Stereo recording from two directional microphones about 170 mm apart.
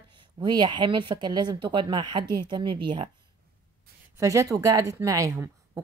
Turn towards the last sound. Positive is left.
turn(degrees=-20)  # may be behind; listen again after turning